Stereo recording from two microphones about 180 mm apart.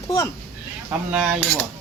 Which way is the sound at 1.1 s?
5° right (ahead or behind).